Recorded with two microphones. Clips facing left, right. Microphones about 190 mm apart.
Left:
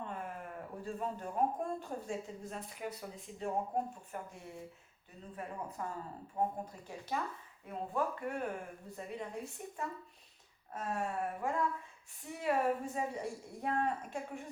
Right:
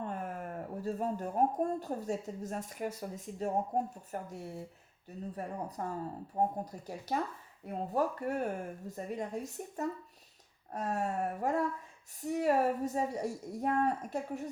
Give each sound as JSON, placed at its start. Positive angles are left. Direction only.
{"t": 0.1, "sound": "a woman's voice", "side_deg": -45}